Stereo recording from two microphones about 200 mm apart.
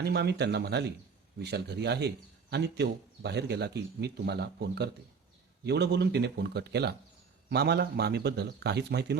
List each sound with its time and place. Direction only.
0.0 s a man's voice: 55° right (ahead or behind)